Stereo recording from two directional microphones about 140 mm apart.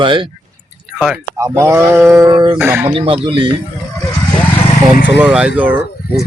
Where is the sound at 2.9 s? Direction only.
40° right (ahead or behind).